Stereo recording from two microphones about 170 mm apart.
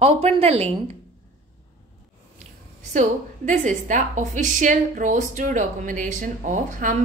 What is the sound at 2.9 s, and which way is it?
A woman's voice, 45° right (ahead or behind).